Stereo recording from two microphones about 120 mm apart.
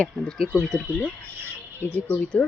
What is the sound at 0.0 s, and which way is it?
Speech, 5° left (ahead or behind).